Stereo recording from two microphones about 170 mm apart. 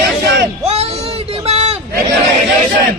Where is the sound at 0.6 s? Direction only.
35° right (ahead or behind).